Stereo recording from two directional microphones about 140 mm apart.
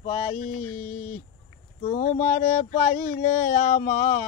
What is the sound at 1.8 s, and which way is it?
Speech, 55° left (ahead or behind).